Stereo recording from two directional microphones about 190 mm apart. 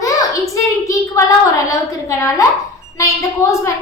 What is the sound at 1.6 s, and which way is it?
A woman's voice, 15° left (ahead or behind).